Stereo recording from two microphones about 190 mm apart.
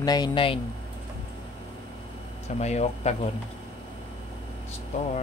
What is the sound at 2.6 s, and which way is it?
Speech, 35° left (ahead or behind).